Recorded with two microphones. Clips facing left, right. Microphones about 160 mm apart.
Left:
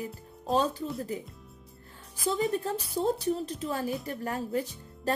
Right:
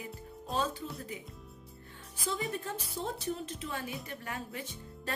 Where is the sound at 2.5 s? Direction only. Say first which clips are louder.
Left 8 dB; 35° left (ahead or behind).